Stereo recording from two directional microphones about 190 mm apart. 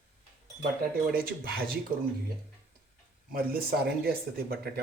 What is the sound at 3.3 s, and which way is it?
Speech, 50° right (ahead or behind).